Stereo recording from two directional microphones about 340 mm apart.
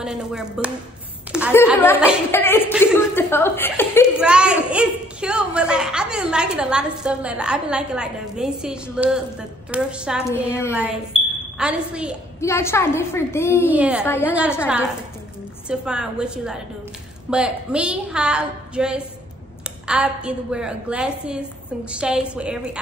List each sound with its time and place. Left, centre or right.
0.0 s a woman's voice: centre
12.4 s a woman's voice: centre
13.7 s a woman's voice: centre
14.0 s a woman's voice: centre